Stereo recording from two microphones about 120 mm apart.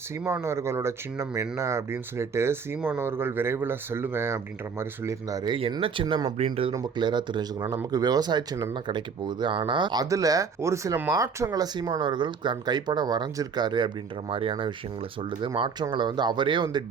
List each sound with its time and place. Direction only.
0.4 s speech: 20° right (ahead or behind)
5.7 s speech: 45° right (ahead or behind)
6.3 s speech: 65° right (ahead or behind)
6.7 s speech: 35° right (ahead or behind)